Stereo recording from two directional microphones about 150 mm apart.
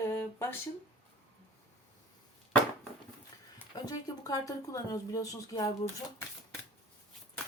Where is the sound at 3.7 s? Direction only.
25° left (ahead or behind).